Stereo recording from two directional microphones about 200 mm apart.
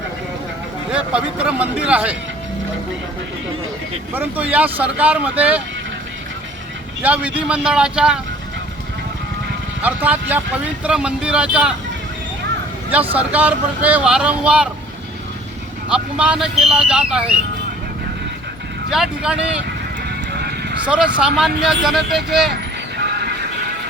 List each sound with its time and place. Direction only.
0.9 s speech: 5° right (ahead or behind)
4.1 s speech: 10° right (ahead or behind)
7.0 s speech: 5° right (ahead or behind)
9.8 s speech: 10° right (ahead or behind)
12.9 s speech: 10° right (ahead or behind)
15.9 s speech: 5° right (ahead or behind)
18.9 s speech: 5° right (ahead or behind)
20.1 s horse: 55° right (ahead or behind)
20.8 s speech: 5° right (ahead or behind)